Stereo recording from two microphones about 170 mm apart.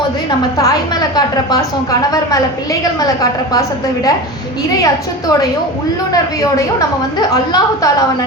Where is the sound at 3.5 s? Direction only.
20° left (ahead or behind).